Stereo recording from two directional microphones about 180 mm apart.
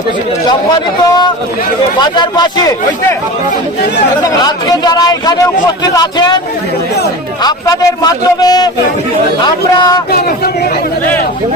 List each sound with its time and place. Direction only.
1.0 s a man's voice: 20° left (ahead or behind)
4.2 s a man's voice: 20° left (ahead or behind)
7.4 s a man's voice: 20° left (ahead or behind)